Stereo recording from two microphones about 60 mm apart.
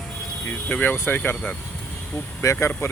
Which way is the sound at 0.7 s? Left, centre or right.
Left.